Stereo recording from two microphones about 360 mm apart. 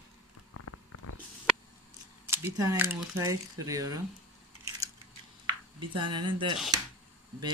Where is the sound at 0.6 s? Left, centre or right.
Left.